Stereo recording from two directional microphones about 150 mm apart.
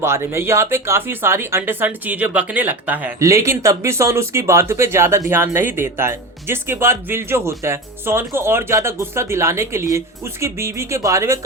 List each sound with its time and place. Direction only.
0.0 s speech: 15° right (ahead or behind)